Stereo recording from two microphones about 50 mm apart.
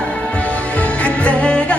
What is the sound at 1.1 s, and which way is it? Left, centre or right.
Music, left.